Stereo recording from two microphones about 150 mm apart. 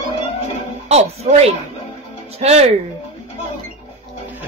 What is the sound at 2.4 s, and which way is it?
Speech, 55° right (ahead or behind).